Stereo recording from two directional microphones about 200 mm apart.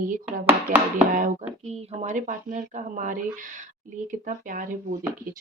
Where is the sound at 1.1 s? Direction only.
40° right (ahead or behind).